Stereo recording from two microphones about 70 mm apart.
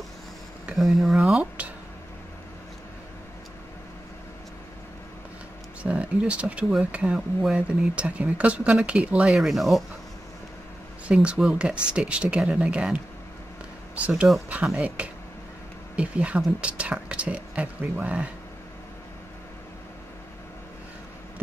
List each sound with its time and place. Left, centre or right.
0.7 s speech: centre
5.8 s speech: centre
9.3 s speech: centre
11.2 s speech: centre